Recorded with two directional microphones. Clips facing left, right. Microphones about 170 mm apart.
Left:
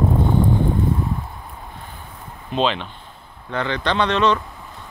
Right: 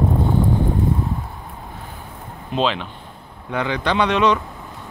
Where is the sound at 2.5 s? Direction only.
5° right (ahead or behind).